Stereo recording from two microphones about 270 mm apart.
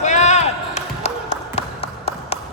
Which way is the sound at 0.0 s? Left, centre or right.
Left.